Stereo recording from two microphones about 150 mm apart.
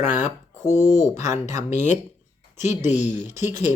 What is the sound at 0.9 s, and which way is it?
Speech, 55° left (ahead or behind).